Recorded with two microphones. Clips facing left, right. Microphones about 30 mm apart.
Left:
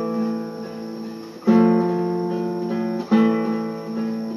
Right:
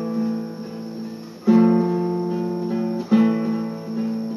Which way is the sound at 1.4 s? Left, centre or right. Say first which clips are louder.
Even; centre.